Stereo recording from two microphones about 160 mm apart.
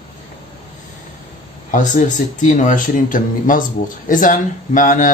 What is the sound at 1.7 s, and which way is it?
Speech, 55° left (ahead or behind).